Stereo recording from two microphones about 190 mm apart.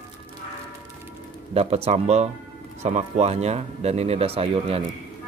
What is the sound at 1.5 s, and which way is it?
Speech, 30° right (ahead or behind).